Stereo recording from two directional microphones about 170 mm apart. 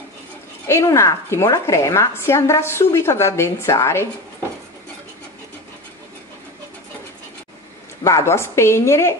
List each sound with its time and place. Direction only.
0.7 s a woman's voice: 15° left (ahead or behind)
8.0 s a woman's voice: 15° left (ahead or behind)